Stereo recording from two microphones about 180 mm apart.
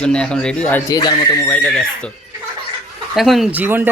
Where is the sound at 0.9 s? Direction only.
25° left (ahead or behind).